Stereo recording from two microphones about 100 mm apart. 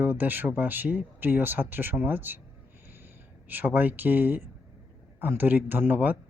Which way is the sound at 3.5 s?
20° right (ahead or behind).